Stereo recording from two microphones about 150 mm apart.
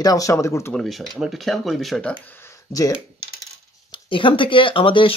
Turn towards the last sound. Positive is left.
turn(degrees=35)  # may be behind; listen again after turning